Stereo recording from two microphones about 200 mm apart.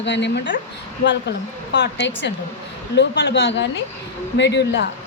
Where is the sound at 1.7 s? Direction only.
60° left (ahead or behind).